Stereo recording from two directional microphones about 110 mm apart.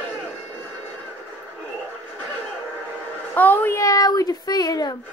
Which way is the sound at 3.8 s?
30° left (ahead or behind).